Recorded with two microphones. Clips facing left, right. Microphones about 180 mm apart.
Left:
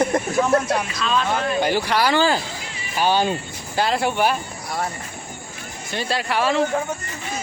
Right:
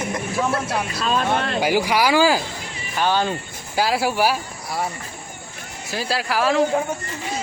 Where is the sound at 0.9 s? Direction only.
40° right (ahead or behind).